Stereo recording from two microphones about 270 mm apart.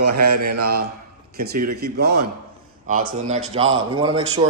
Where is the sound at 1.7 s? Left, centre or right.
Right; by 4.3 s centre.